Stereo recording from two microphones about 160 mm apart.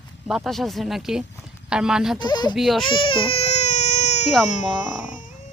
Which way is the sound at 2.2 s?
25° left (ahead or behind).